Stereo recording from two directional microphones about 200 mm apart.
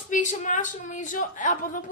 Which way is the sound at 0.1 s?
40° left (ahead or behind).